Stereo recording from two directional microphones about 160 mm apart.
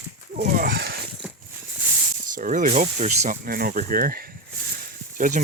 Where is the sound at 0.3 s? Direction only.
60° right (ahead or behind).